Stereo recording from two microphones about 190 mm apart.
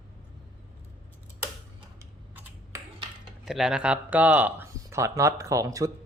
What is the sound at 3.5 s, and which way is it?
Speech, centre (ahead or behind).